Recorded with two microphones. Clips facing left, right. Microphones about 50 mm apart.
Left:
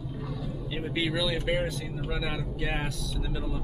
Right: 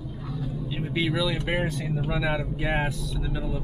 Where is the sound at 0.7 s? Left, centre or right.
Centre.